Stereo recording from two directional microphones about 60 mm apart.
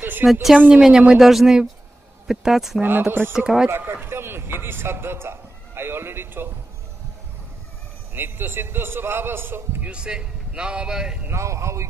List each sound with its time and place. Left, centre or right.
0.0 s speech: right
0.3 s speech: centre
0.6 s a woman's voice: centre
0.8 s speech: centre
2.8 s a man's voice: right
3.3 s speech: centre
3.7 s a sound: right
8.1 s a man's voice: right
9.8 s speech: centre
11.2 s speech: right